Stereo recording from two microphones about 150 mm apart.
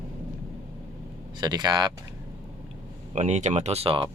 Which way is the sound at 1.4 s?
30° right (ahead or behind).